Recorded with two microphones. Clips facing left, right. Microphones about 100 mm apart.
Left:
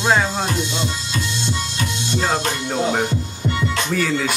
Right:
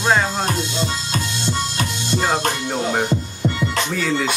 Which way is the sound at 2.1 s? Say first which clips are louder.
Right 1 dB; 5° right (ahead or behind).